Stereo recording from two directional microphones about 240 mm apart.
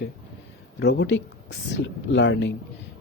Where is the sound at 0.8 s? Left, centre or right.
Left.